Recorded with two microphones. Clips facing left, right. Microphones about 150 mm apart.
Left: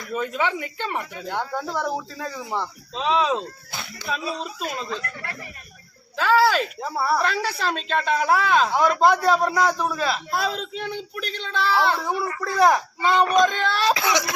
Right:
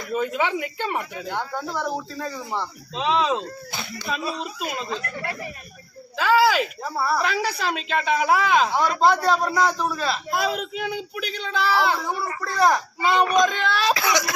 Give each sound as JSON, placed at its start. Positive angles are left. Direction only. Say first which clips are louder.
{"t": 0.1, "sound": "speech", "louder": "right 1 dB", "side_deg": -15}
{"t": 1.3, "sound": "a woman's voice", "louder": "left 2 dB", "side_deg": 10}
{"t": 6.1, "sound": "a woman's voice", "louder": "even", "side_deg": 0}
{"t": 8.8, "sound": "a woman's voice", "louder": "left 1 dB", "side_deg": 10}
{"t": 10.4, "sound": "a woman's voice", "louder": "right 2 dB", "side_deg": -10}
{"t": 12.5, "sound": "speech", "louder": "left 2 dB", "side_deg": 10}
{"t": 13.0, "sound": "a woman's voice", "louder": "even", "side_deg": -5}
{"t": 13.9, "sound": "speech", "louder": "even", "side_deg": 20}